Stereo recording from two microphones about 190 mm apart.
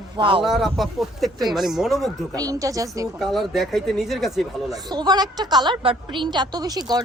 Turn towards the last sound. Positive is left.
turn(degrees=-20)  # may be behind; listen again after turning